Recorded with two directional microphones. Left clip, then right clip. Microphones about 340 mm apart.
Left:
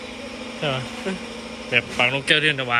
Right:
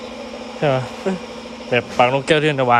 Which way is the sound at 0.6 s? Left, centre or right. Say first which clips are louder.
Right 7 dB; centre.